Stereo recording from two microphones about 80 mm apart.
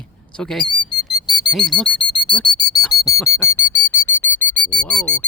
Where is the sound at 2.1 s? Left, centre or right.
Left.